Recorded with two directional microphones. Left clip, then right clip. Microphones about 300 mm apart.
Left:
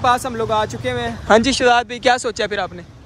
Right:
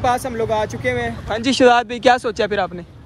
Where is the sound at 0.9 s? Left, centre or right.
Centre.